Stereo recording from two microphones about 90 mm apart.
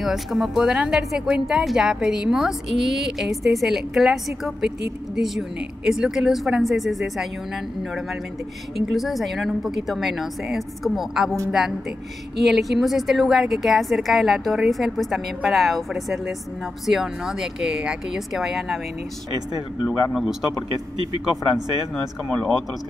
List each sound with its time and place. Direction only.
0.0 s a woman's voice: 5° right (ahead or behind)
8.9 s a woman's voice: centre (ahead or behind)
19.9 s a woman's voice: centre (ahead or behind)
21.0 s speech: 55° right (ahead or behind)